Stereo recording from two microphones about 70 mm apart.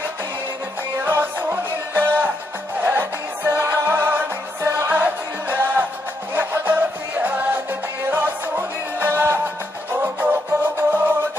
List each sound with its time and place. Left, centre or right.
0.9 s music: right